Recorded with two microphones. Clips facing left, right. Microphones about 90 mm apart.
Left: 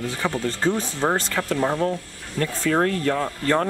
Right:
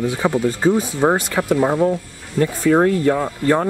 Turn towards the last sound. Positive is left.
turn(degrees=-10)  # may be behind; listen again after turning